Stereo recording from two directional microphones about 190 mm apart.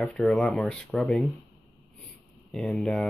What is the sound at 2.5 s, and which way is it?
Speech, centre (ahead or behind).